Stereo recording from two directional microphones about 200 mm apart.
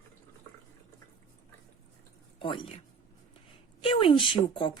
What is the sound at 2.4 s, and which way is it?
Speech, 25° left (ahead or behind).